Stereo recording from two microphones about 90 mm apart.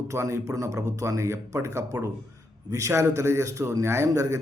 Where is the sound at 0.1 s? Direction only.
35° right (ahead or behind).